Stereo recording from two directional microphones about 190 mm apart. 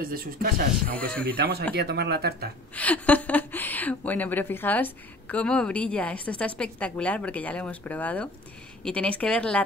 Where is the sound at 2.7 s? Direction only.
10° left (ahead or behind).